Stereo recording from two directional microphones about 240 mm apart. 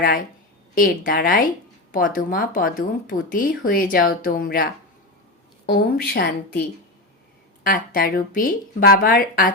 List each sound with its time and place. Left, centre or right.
0.8 s speech: left
7.6 s speech: left